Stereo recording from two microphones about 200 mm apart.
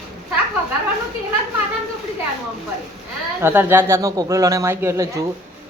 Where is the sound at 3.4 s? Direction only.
10° right (ahead or behind).